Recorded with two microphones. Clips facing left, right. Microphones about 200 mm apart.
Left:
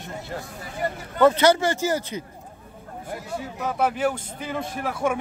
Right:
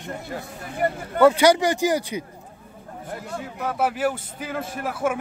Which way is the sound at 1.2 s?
10° right (ahead or behind).